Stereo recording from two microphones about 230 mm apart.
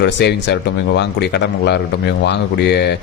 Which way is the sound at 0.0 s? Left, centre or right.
Left.